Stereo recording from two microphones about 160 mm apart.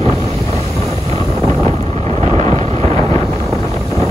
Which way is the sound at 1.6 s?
40° right (ahead or behind).